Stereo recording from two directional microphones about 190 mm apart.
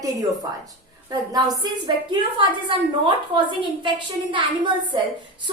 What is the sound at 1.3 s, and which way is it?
Speech, 20° right (ahead or behind).